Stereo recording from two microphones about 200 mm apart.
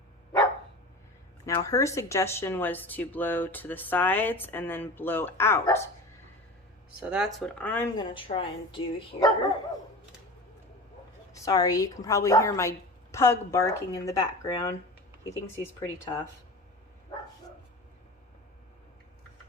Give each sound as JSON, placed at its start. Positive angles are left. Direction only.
{"t": 1.5, "sound": "speech", "side_deg": 15}
{"t": 7.0, "sound": "speech", "side_deg": -5}
{"t": 7.9, "sound": "speech", "side_deg": 25}
{"t": 11.4, "sound": "speech", "side_deg": 20}